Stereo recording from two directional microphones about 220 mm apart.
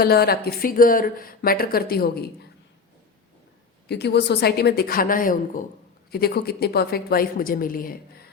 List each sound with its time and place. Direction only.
0.0 s speech: 45° left (ahead or behind)
3.8 s speech: 50° left (ahead or behind)